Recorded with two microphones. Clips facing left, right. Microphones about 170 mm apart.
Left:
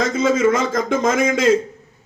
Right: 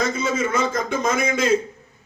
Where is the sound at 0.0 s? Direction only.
90° left.